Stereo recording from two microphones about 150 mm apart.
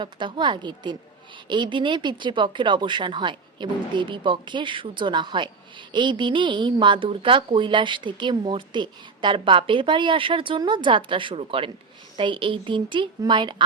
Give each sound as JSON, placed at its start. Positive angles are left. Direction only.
{"t": 0.0, "sound": "a woman's voice", "side_deg": -30}